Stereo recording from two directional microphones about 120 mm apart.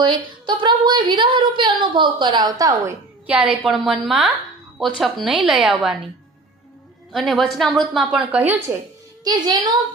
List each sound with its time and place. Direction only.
0.0 s a woman's voice: 40° right (ahead or behind)
3.2 s a woman's voice: 10° right (ahead or behind)
7.1 s a woman's voice: centre (ahead or behind)
9.2 s a woman's voice: 35° right (ahead or behind)